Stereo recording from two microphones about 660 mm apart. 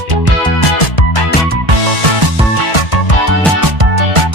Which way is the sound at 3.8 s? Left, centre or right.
Right.